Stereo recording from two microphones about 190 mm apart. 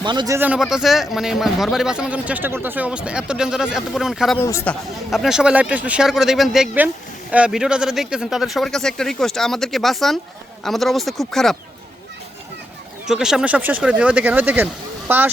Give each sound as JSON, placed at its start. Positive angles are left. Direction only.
{"t": 0.0, "sound": "speech", "side_deg": -25}
{"t": 0.3, "sound": "speech", "side_deg": -5}
{"t": 4.4, "sound": "speech", "side_deg": 15}
{"t": 13.1, "sound": "speech", "side_deg": -5}